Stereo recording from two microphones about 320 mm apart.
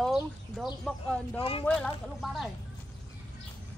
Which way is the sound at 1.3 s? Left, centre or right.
Centre.